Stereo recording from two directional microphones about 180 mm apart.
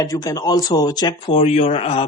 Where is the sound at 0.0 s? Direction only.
20° left (ahead or behind).